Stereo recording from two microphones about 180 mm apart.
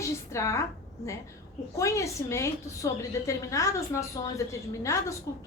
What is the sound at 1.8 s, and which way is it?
A woman's voice, 15° left (ahead or behind).